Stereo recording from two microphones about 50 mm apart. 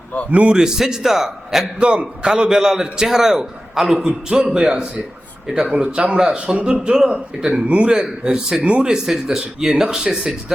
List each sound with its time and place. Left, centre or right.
0.3 s speech: right
0.5 s a man's voice: centre
1.8 s a man's voice: right
5.6 s a man's voice: right
7.9 s a man's voice: centre